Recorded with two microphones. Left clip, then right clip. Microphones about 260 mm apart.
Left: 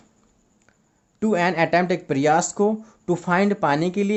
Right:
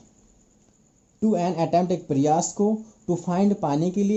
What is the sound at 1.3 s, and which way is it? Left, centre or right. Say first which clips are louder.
Speech: left 4 dB; left.